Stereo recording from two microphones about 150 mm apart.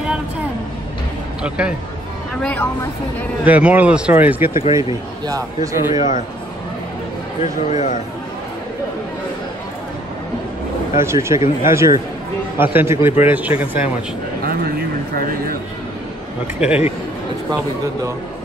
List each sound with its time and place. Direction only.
2.4 s speech: 10° left (ahead or behind)
3.4 s speech: 10° right (ahead or behind)
5.2 s a man's voice: 25° right (ahead or behind)
7.7 s speech: 50° left (ahead or behind)
11.0 s speech: 20° right (ahead or behind)
14.4 s a sound: 75° right (ahead or behind)
16.5 s speech: 10° right (ahead or behind)